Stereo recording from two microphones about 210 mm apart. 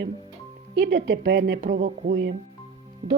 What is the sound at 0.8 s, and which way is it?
A woman's voice, 55° right (ahead or behind).